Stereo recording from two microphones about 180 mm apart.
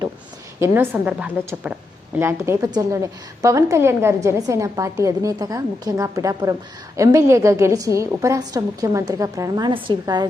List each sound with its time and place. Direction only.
0.6 s a woman's voice: 10° right (ahead or behind)